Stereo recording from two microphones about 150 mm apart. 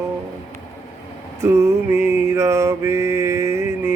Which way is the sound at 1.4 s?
15° right (ahead or behind).